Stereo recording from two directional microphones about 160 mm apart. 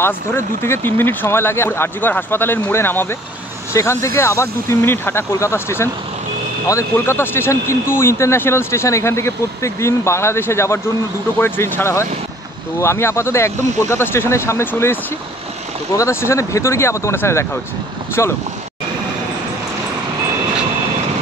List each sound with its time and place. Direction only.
0.0 s a man's voice: 15° left (ahead or behind)
16.0 s a man's voice: 15° left (ahead or behind)